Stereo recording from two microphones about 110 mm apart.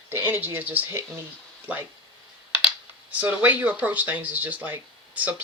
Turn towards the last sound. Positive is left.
turn(degrees=-15)  # may be behind; listen again after turning